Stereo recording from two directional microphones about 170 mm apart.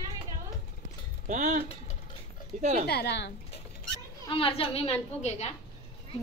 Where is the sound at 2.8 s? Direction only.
70° left (ahead or behind).